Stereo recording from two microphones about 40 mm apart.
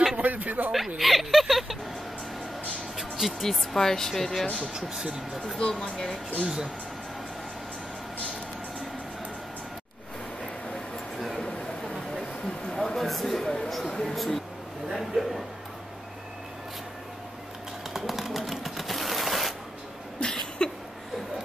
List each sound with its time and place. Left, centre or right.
0.2 s speech: right
0.9 s speech: centre
3.0 s music: centre
3.4 s speech: centre
4.7 s speech: centre
5.6 s speech: centre
6.4 s speech: centre
12.4 s a sound: centre
17.9 s shuffling cards: centre
20.6 s a sound: left